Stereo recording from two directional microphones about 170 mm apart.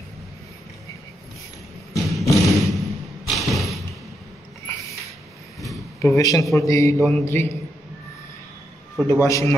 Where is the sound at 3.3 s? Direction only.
Centre (ahead or behind).